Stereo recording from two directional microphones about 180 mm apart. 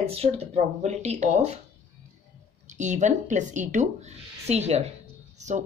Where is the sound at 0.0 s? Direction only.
35° right (ahead or behind).